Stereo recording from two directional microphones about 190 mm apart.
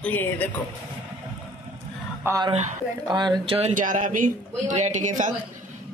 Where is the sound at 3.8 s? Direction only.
45° right (ahead or behind).